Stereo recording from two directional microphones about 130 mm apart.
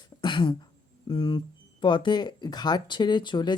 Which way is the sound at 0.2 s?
40° left (ahead or behind).